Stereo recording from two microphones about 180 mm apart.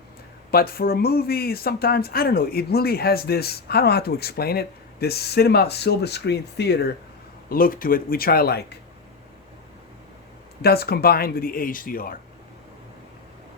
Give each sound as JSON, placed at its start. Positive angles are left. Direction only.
{"t": 0.5, "sound": "speech", "side_deg": 55}
{"t": 7.5, "sound": "speech", "side_deg": 50}
{"t": 10.6, "sound": "speech", "side_deg": 60}